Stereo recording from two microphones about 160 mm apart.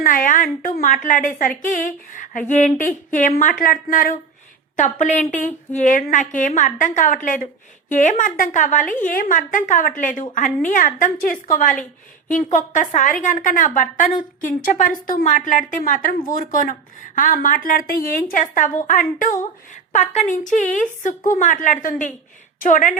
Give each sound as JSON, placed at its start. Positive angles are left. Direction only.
{"t": 0.0, "sound": "a woman's voice", "side_deg": 60}